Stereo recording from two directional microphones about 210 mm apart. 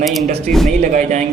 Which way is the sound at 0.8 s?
35° right (ahead or behind).